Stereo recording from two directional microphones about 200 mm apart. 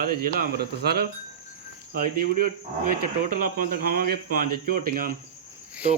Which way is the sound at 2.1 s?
45° right (ahead or behind).